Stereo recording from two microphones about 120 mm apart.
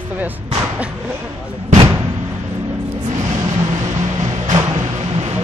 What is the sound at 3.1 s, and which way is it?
Vehicle, 80° right.